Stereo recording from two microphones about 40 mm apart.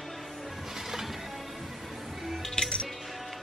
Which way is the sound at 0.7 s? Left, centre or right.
Centre.